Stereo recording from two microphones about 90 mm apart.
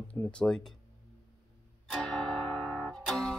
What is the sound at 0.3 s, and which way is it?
Speech, 10° left (ahead or behind).